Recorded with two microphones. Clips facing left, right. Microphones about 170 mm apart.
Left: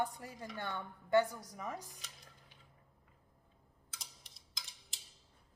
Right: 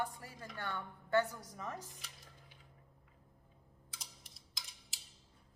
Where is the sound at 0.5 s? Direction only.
20° left (ahead or behind).